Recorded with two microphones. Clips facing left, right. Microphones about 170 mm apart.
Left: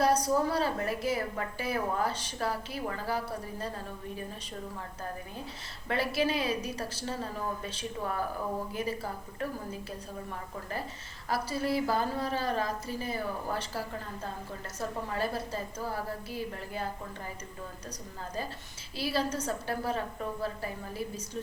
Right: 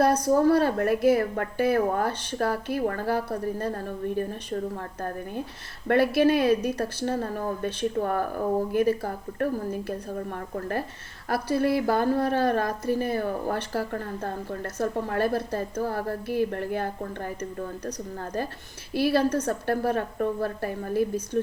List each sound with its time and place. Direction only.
0.0 s a woman's voice: 55° right (ahead or behind)
5.9 s a woman's voice: 55° right (ahead or behind)
18.9 s a woman's voice: 60° right (ahead or behind)